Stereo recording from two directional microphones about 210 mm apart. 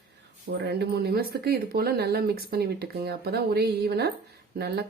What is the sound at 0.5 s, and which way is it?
Speech, 50° right (ahead or behind).